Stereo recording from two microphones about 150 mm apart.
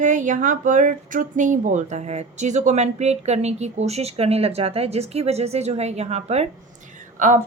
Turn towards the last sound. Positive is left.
turn(degrees=-55)  # may be behind; listen again after turning